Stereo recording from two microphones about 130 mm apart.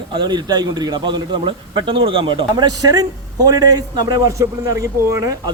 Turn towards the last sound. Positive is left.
turn(degrees=-25)  # may be behind; listen again after turning